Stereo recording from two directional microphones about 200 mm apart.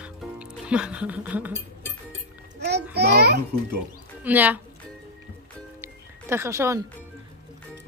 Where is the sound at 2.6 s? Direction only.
55° right (ahead or behind).